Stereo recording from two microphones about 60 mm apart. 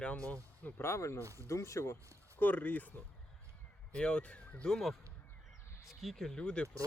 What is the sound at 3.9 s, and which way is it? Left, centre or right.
Speech, centre.